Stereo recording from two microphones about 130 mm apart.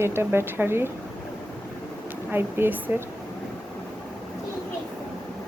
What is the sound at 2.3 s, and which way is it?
Speech, 15° right (ahead or behind).